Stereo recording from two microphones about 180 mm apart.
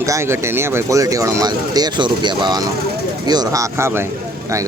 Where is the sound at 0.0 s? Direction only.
15° right (ahead or behind).